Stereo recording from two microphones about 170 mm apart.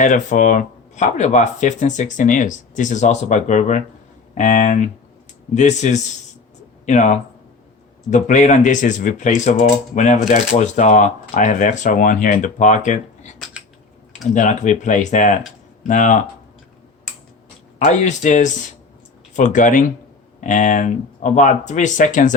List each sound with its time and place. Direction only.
0.0 s speech: 50° left (ahead or behind)
17.7 s speech: 45° left (ahead or behind)